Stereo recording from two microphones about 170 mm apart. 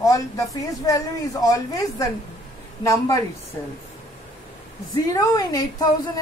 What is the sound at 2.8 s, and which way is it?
Speech, 20° left (ahead or behind).